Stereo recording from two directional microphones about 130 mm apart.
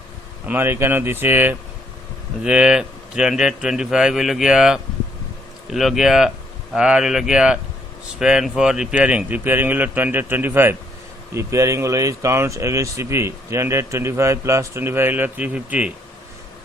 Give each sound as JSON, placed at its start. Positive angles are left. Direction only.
{"t": 0.4, "sound": "a man's voice", "side_deg": -15}